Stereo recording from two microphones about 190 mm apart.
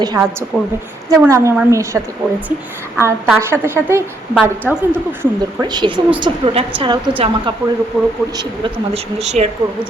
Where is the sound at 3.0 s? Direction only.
10° right (ahead or behind).